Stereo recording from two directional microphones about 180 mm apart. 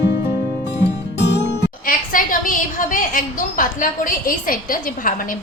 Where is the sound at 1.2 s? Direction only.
75° left (ahead or behind).